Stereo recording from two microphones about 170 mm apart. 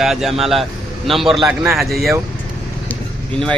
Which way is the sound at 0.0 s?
Centre (ahead or behind).